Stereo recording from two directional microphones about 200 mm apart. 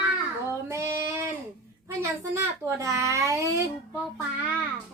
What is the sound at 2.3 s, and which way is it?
Speech, 15° right (ahead or behind).